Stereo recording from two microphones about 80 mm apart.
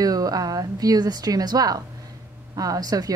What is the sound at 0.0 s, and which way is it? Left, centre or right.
A woman's voice, right.